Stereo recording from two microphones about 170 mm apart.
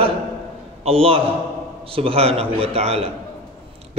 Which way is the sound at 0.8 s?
35° right (ahead or behind).